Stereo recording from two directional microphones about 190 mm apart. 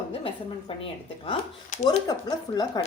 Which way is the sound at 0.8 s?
30° left (ahead or behind).